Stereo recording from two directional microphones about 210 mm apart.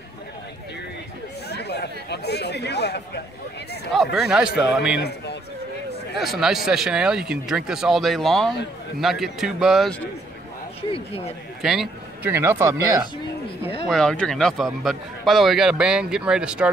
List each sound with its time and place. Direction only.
1.5 s chatter: 50° left (ahead or behind)
3.9 s speech: centre (ahead or behind)
4.9 s a man's voice: 55° left (ahead or behind)
6.1 s speech: centre (ahead or behind)
10.8 s speech: 25° left (ahead or behind)
11.6 s speech: centre (ahead or behind)
13.8 s speech: 5° left (ahead or behind)